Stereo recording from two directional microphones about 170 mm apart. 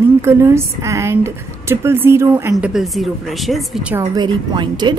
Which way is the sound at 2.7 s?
Centre (ahead or behind).